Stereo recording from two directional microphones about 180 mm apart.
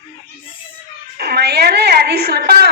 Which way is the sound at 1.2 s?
65° right (ahead or behind).